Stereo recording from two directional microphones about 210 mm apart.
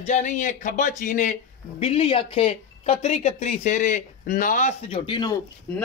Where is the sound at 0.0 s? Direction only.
35° left (ahead or behind).